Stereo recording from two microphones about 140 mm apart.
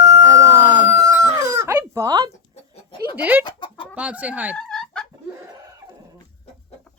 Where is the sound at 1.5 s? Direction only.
20° right (ahead or behind).